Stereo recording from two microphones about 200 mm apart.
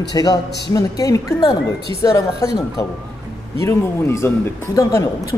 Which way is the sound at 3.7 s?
15° left (ahead or behind).